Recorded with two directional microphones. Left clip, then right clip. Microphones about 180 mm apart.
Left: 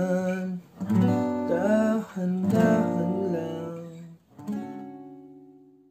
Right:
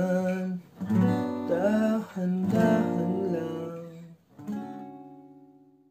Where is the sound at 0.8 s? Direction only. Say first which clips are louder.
Left 2 dB; 35° left (ahead or behind).